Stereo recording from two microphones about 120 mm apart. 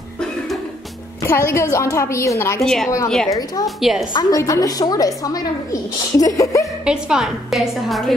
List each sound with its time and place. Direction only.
1.2 s a woman's voice: 20° left (ahead or behind)
2.6 s a woman's voice: 5° left (ahead or behind)
3.3 s a woman's voice: 30° left (ahead or behind)
3.6 s a woman's voice: centre (ahead or behind)
4.1 s a woman's voice: 35° left (ahead or behind)
6.8 s a woman's voice: 5° right (ahead or behind)